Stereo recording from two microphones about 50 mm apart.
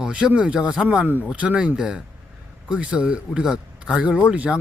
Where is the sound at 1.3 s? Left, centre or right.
Right.